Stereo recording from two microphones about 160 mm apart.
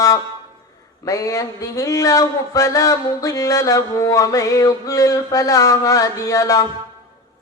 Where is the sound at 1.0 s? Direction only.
20° left (ahead or behind).